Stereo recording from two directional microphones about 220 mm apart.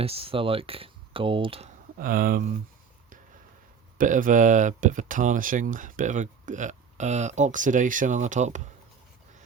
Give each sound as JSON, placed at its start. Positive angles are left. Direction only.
{"t": 0.0, "sound": "speech", "side_deg": -25}
{"t": 2.0, "sound": "speech", "side_deg": -40}
{"t": 3.9, "sound": "speech", "side_deg": -35}